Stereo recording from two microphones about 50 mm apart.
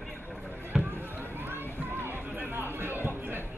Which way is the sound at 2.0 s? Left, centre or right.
Right.